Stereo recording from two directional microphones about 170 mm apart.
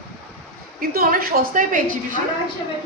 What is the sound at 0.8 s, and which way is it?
A woman's voice, 60° right (ahead or behind).